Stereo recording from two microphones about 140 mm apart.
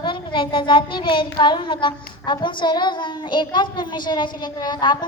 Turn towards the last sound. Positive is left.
turn(degrees=30)  # may be behind; listen again after turning